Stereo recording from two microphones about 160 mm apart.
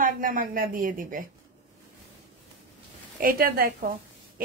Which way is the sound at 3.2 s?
65° right (ahead or behind).